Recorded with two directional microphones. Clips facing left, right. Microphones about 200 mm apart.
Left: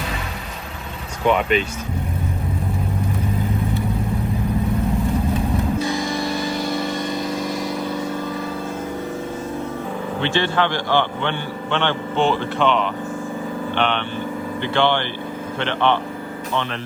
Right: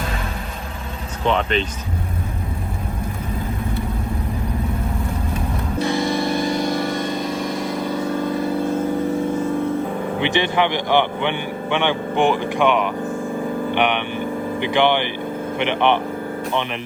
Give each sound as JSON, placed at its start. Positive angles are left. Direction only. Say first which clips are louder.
{"t": 1.3, "sound": "speech", "louder": "left 2 dB", "side_deg": 10}
{"t": 10.2, "sound": "a man's voice", "louder": "right 1 dB", "side_deg": -15}